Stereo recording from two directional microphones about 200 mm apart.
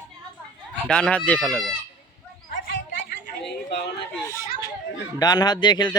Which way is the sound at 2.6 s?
50° left (ahead or behind).